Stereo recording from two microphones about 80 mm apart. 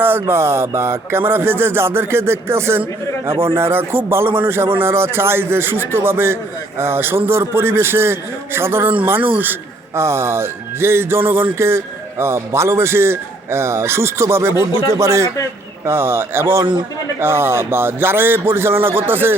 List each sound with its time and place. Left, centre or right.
0.0 s a man's voice: right
9.4 s a sound: right
10.0 s a man's voice: right